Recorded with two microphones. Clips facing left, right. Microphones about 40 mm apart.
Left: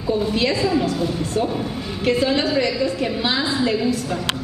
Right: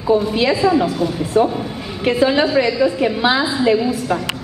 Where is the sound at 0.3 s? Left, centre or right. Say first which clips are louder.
Right 4 dB; centre.